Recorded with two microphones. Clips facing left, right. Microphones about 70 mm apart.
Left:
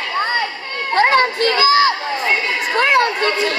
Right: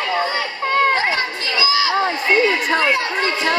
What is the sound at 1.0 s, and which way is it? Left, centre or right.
Children playing, left.